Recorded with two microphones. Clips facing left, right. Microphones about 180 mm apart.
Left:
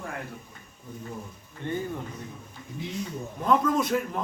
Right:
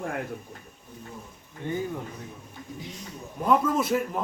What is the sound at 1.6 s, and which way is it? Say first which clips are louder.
Speech: even; 10° right (ahead or behind).